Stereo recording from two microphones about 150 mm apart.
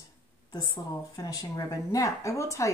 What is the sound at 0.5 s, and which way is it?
Speech, 25° left (ahead or behind).